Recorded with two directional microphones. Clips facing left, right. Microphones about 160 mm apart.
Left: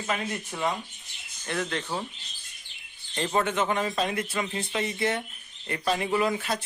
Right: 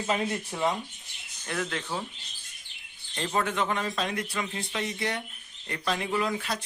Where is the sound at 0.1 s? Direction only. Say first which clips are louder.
Right 2 dB; 25° right (ahead or behind).